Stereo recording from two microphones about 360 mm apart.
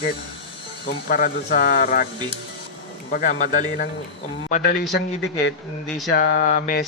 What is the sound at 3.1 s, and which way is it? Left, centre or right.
Speech, left.